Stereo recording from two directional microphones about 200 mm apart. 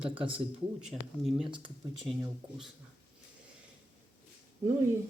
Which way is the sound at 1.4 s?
25° right (ahead or behind).